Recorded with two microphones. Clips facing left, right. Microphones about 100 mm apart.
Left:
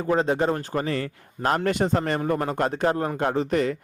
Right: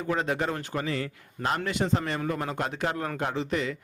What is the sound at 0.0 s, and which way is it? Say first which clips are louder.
Speech: left 6 dB; 35° left (ahead or behind).